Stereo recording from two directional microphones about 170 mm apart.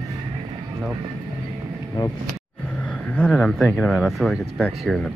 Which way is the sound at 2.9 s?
5° left (ahead or behind).